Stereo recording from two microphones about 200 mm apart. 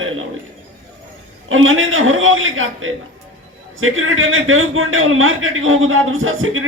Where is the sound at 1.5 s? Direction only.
90° right.